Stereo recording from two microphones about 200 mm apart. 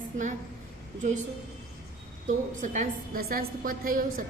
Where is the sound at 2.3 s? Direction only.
40° right (ahead or behind).